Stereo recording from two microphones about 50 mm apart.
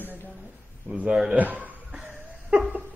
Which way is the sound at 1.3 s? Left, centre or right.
Right.